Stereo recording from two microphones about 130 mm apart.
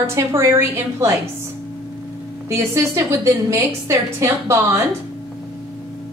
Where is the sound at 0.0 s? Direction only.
20° right (ahead or behind).